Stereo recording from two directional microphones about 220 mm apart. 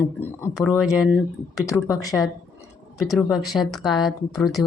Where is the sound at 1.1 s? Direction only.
15° left (ahead or behind).